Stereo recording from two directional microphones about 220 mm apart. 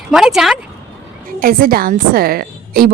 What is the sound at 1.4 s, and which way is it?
A woman's voice, 40° right (ahead or behind).